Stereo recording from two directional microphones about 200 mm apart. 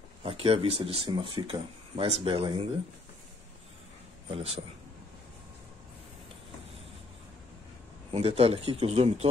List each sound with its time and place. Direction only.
0.2 s speech: 30° right (ahead or behind)
4.3 s speech: 30° right (ahead or behind)
8.1 s speech: 30° right (ahead or behind)